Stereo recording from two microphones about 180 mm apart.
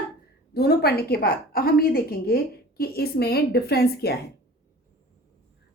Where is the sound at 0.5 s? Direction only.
65° left (ahead or behind).